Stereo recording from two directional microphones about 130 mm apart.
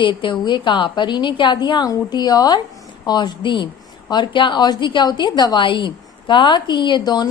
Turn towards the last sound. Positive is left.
turn(degrees=30)  # may be behind; listen again after turning